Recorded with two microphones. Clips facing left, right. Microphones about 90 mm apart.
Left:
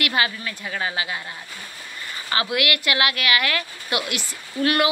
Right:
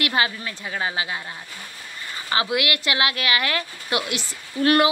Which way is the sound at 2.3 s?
25° right (ahead or behind).